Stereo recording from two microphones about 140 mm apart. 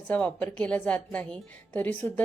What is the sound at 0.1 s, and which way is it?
A woman's voice, 10° left (ahead or behind).